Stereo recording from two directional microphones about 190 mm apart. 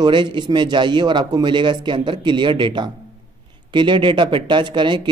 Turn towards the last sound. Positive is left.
turn(degrees=-25)  # may be behind; listen again after turning